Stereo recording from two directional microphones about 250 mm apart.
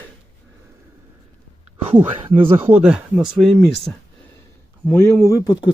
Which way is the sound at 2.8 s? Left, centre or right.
Centre.